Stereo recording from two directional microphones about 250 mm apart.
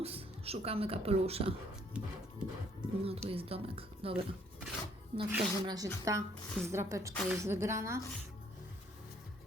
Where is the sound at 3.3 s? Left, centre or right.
Right.